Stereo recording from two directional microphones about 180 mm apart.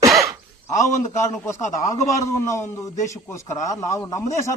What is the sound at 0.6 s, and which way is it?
A man's voice, 15° left (ahead or behind).